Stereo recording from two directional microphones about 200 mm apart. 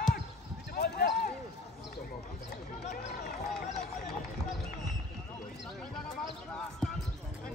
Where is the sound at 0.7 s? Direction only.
55° left (ahead or behind).